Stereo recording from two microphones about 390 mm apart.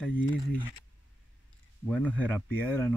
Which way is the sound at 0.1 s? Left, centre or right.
Left.